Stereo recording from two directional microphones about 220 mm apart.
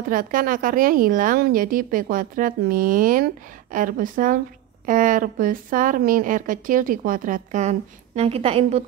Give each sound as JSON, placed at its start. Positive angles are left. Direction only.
{"t": 0.1, "sound": "a woman's voice", "side_deg": -40}